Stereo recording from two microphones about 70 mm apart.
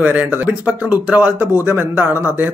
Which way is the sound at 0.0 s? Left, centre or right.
Right.